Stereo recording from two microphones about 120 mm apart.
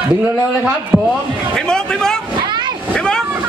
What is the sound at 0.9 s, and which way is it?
Speech, 10° right (ahead or behind).